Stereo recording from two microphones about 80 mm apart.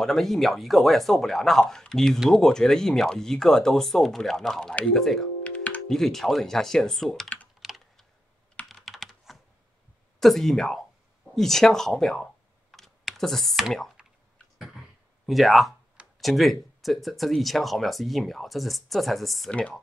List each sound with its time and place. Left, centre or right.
0.0 s speech: centre
5.4 s typing: centre
5.9 s speech: centre
7.6 s typing: centre
8.6 s computer keyboard: centre
10.2 s speech: centre
12.7 s computer keyboard: centre
15.2 s speech: centre
19.5 s speech: centre